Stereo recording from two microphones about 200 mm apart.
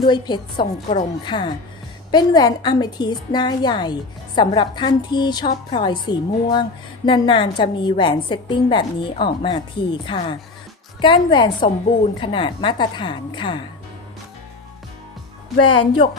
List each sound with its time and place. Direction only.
0.0 s a woman's voice: 20° left (ahead or behind)
15.6 s a woman's voice: 25° left (ahead or behind)